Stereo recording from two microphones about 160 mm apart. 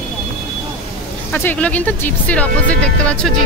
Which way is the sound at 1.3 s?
10° left (ahead or behind).